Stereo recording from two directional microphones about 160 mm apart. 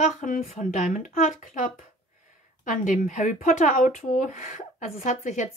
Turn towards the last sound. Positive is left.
turn(degrees=50)  # may be behind; listen again after turning